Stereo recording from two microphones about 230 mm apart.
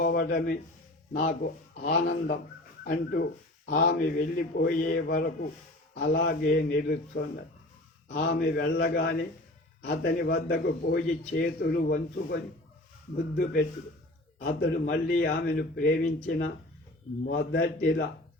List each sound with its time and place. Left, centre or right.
0.0 s a man's voice: left
8.3 s a man's voice: left